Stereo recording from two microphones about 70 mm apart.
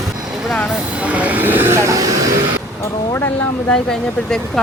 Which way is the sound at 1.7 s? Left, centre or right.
Right.